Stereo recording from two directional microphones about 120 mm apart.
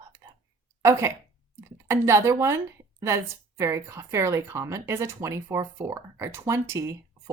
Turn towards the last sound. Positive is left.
turn(degrees=-25)  # may be behind; listen again after turning